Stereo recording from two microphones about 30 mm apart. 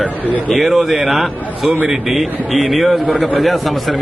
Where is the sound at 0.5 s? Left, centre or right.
Centre.